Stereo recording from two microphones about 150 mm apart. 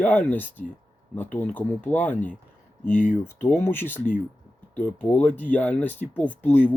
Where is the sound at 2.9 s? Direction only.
60° left (ahead or behind).